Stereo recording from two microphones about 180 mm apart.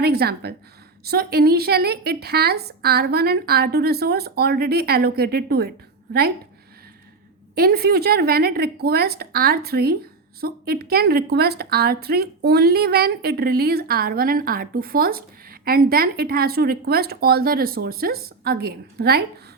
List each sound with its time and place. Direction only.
0.0 s speech: 60° right (ahead or behind)
7.5 s speech: 60° right (ahead or behind)